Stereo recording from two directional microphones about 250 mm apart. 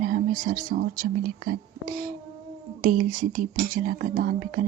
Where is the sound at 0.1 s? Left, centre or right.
Right.